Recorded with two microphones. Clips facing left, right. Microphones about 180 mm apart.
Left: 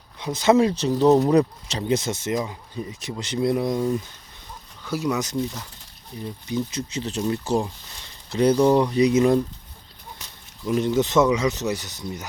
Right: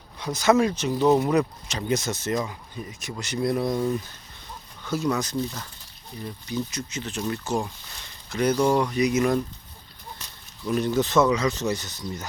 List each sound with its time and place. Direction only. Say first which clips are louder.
0.2 s speech: left 2 dB; 25° left (ahead or behind); by 5.2 s 10° left (ahead or behind)
5.2 s speech: left 2 dB; 20° left (ahead or behind)
8.3 s speech: left 4 dB; 30° left (ahead or behind)
10.2 s speech: left 1 dB; 15° left (ahead or behind)